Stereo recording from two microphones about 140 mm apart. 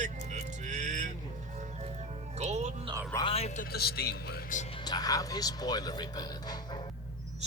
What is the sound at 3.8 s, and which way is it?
Speech, 90° left.